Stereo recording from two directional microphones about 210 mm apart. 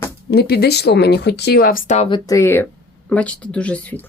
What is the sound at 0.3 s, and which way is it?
Speech, 50° left (ahead or behind).